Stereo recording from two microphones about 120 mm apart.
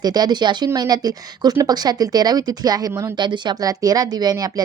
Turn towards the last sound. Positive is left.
turn(degrees=-35)  # may be behind; listen again after turning